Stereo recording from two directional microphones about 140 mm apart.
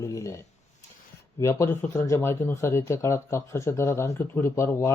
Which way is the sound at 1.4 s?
20° left (ahead or behind).